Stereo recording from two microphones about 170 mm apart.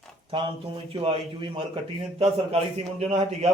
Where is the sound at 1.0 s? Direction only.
35° right (ahead or behind).